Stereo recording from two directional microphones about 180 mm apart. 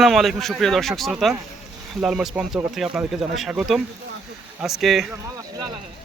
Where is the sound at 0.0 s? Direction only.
Centre (ahead or behind).